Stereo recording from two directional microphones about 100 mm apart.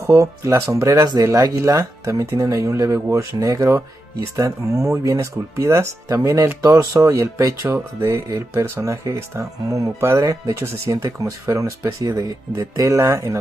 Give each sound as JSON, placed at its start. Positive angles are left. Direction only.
{"t": 0.0, "sound": "speech", "side_deg": -30}